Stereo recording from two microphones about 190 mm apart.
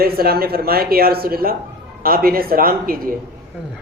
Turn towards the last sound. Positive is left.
turn(degrees=-50)  # may be behind; listen again after turning